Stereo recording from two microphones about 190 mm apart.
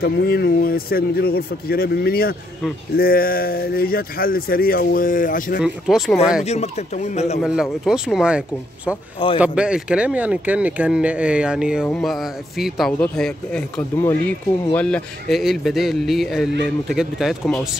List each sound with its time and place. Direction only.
0.0 s speech: 55° left (ahead or behind)
5.6 s speech: centre (ahead or behind)
6.4 s speech: 35° left (ahead or behind)
7.8 s speech: centre (ahead or behind)
9.4 s speech: 5° right (ahead or behind)